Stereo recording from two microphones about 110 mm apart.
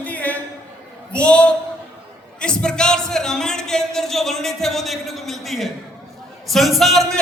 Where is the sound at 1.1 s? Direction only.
10° left (ahead or behind).